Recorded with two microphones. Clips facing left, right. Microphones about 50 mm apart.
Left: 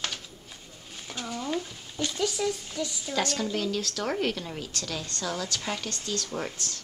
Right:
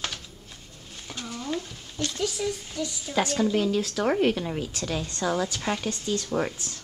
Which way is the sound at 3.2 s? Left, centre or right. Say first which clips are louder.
Right 5 dB; centre.